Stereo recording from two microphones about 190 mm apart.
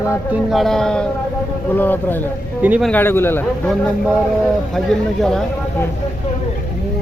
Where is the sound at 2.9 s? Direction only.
10° left (ahead or behind).